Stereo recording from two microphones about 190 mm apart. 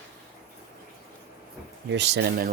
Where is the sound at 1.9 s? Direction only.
65° right (ahead or behind).